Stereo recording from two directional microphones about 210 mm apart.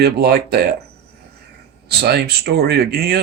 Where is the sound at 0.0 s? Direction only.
50° right (ahead or behind).